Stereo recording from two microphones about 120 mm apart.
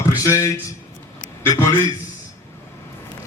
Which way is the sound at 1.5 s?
30° left (ahead or behind).